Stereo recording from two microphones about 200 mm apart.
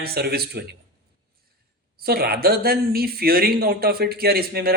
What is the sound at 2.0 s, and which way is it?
Speech, 50° right (ahead or behind).